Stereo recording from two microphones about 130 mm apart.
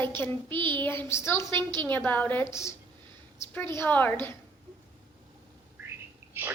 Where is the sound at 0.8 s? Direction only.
20° left (ahead or behind).